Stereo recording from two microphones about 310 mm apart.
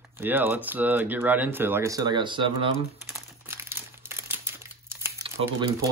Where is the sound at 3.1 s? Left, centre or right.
Centre.